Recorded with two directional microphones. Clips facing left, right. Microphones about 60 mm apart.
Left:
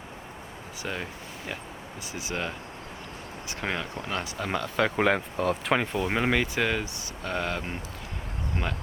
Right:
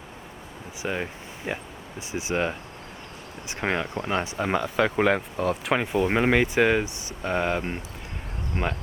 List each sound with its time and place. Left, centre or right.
0.8 s speech: centre
3.6 s speech: right
4.8 s speech: centre; by 8.7 s right